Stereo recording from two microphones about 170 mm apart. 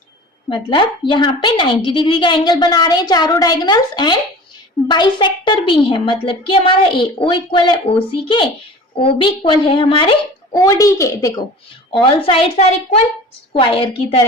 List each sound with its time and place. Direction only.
0.5 s a woman's voice: 30° left (ahead or behind)
10.5 s a woman's voice: 20° left (ahead or behind)
12.0 s a woman's voice: 30° left (ahead or behind)